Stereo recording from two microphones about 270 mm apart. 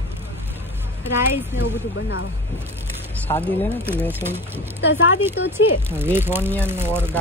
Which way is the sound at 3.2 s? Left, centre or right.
Centre.